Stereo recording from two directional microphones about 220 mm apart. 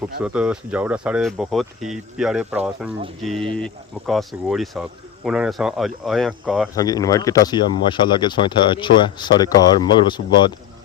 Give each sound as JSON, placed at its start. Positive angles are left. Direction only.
{"t": 0.2, "sound": "speech", "side_deg": -5}
{"t": 6.7, "sound": "speech", "side_deg": 15}